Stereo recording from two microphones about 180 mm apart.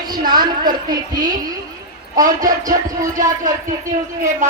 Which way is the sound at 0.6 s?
25° right (ahead or behind).